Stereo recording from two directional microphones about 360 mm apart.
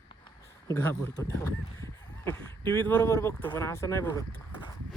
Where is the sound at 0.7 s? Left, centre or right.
Centre.